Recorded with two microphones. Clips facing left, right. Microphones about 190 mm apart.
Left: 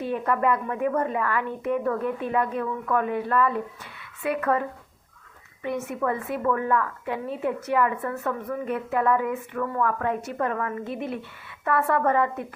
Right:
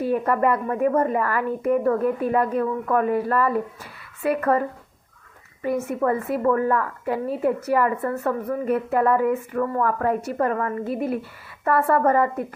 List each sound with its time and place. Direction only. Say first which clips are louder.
0.1 s a woman's voice: right 2 dB; 45° right (ahead or behind)
5.6 s a woman's voice: right 5 dB; 45° right (ahead or behind)